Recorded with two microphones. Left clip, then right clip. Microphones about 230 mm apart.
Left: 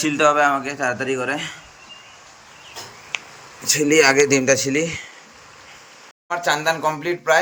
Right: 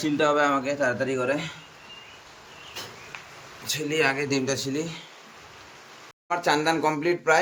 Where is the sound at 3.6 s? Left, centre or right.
Centre.